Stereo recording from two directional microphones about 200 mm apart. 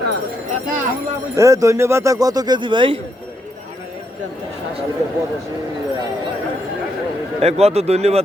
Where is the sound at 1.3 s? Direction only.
15° right (ahead or behind).